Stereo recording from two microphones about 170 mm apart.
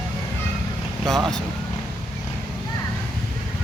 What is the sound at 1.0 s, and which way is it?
Speech, centre (ahead or behind).